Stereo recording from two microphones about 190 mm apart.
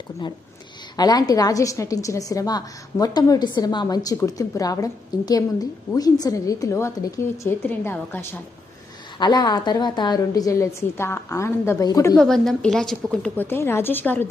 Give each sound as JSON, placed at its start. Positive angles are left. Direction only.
{"t": 0.9, "sound": "a woman's voice", "side_deg": 20}
{"t": 12.2, "sound": "a woman's voice", "side_deg": 5}